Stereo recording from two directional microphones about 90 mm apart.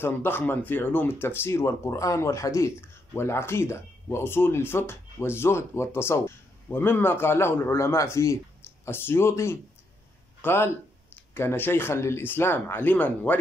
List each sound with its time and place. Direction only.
0.0 s speech: 25° left (ahead or behind)